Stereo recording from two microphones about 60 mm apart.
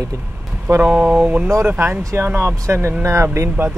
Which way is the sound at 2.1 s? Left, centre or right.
Right.